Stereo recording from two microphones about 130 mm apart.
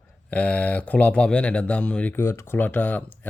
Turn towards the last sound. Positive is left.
turn(degrees=10)  # may be behind; listen again after turning